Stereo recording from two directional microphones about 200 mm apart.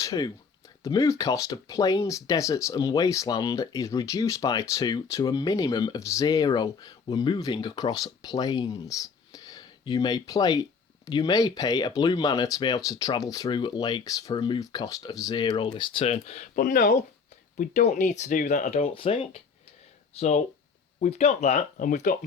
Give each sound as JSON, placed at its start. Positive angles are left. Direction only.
{"t": 0.0, "sound": "speech", "side_deg": 15}